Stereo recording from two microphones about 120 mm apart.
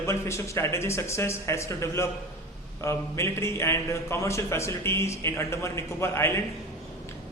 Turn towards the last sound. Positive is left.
turn(degrees=20)  # may be behind; listen again after turning